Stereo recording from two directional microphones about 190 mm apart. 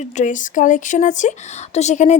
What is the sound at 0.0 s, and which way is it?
Speech, 40° left (ahead or behind).